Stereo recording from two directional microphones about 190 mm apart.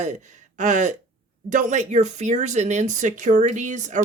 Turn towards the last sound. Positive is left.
turn(degrees=-40)  # may be behind; listen again after turning